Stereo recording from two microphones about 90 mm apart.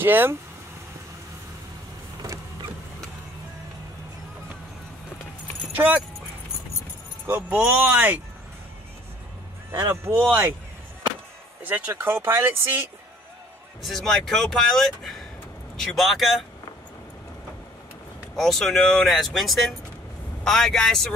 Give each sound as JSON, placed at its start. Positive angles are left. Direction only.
{"t": 0.0, "sound": "speech", "side_deg": -25}
{"t": 5.8, "sound": "speech", "side_deg": -20}
{"t": 7.2, "sound": "speech", "side_deg": -20}
{"t": 9.7, "sound": "speech", "side_deg": -30}
{"t": 11.6, "sound": "speech", "side_deg": -20}
{"t": 13.8, "sound": "speech", "side_deg": 5}
{"t": 18.3, "sound": "speech", "side_deg": 5}